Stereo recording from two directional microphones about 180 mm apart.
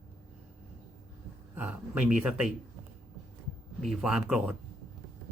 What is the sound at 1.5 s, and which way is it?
Speech, 10° right (ahead or behind).